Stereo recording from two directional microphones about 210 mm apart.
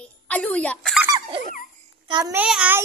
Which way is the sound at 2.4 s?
5° right (ahead or behind).